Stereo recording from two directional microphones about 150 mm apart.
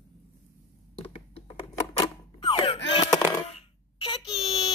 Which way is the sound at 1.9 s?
30° left (ahead or behind).